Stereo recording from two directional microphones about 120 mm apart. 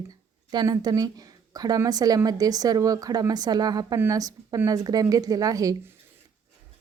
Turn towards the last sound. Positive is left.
turn(degrees=-30)  # may be behind; listen again after turning